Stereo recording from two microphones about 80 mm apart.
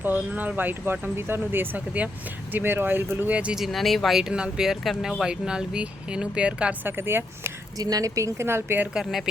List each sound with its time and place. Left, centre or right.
0.0 s speech: right
3.3 s speech: centre
3.6 s speech: centre
6.8 s speech: right
7.8 s speech: right
9.0 s speech: centre